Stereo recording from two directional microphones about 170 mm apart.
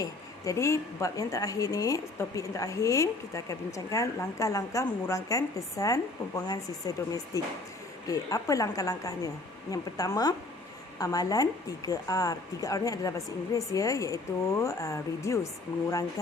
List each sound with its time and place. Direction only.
0.0 s a woman's voice: 20° left (ahead or behind)